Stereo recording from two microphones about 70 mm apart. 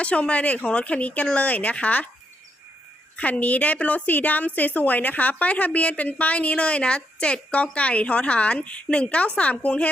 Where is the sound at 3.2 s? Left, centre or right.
Left.